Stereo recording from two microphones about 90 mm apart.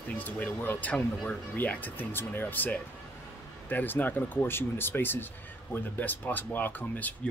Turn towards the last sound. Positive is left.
turn(degrees=20)  # may be behind; listen again after turning